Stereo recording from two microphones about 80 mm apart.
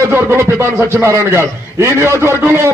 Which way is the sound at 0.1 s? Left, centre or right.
Right.